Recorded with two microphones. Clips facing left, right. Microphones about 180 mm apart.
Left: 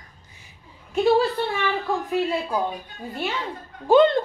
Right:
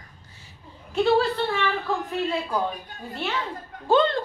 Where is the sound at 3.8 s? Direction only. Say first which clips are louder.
Left 5 dB; 15° left (ahead or behind).